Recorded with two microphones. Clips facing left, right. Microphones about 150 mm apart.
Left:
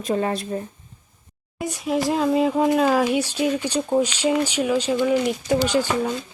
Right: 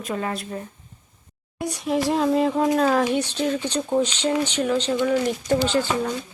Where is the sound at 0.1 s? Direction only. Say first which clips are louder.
Left 5 dB; 30° left (ahead or behind).